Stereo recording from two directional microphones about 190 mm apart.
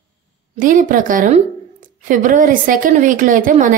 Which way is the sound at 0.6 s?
45° right (ahead or behind).